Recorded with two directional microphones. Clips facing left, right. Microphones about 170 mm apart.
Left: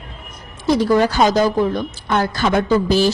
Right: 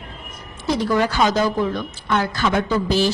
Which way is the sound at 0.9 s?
35° left (ahead or behind).